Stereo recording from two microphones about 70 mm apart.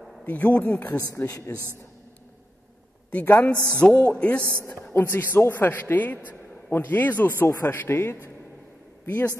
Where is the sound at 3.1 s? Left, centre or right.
Left.